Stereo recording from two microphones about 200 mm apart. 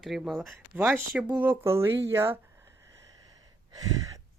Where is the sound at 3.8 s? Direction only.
15° right (ahead or behind).